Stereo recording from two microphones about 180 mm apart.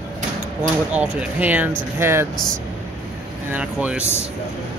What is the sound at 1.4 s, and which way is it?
Speech, 10° right (ahead or behind).